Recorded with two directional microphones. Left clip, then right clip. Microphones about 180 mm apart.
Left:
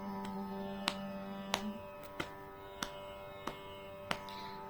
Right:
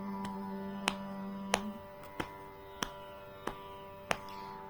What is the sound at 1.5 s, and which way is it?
Music, 25° right (ahead or behind).